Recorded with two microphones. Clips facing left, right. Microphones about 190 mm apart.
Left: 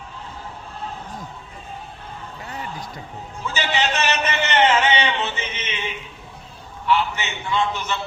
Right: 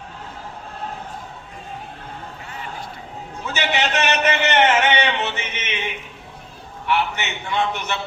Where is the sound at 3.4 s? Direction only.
65° right (ahead or behind).